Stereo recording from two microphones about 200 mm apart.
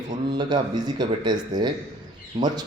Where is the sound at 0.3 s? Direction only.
20° right (ahead or behind).